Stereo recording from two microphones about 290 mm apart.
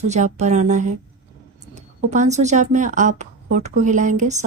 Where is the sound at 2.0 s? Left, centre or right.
Right.